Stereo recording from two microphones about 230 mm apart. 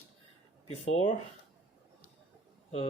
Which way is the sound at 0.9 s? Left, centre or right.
Left.